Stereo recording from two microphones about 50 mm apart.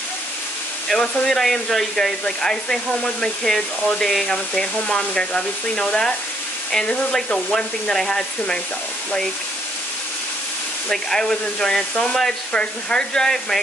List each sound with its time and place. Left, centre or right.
1.2 s speech: centre
10.9 s speech: centre